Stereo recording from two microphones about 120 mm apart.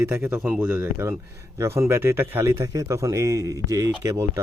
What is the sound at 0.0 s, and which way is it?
A man's voice, 15° right (ahead or behind).